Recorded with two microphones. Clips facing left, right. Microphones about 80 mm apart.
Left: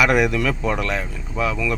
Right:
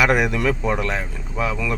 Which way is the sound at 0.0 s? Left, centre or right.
Right.